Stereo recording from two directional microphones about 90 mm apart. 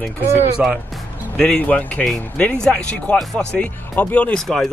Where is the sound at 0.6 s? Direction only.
10° right (ahead or behind).